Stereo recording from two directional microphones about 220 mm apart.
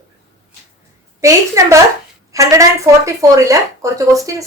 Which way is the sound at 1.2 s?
15° right (ahead or behind).